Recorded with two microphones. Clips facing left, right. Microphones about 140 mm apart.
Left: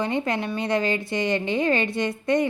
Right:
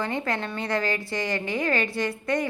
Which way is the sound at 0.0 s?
20° left (ahead or behind).